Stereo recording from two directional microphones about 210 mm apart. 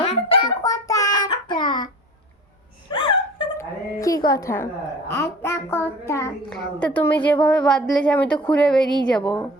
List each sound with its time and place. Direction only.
0.0 s child singing: 25° left (ahead or behind)
2.9 s a woman's voice: 20° left (ahead or behind); by 9.4 s 5° left (ahead or behind)